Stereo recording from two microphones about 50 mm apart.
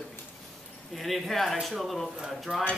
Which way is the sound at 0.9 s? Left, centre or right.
Centre.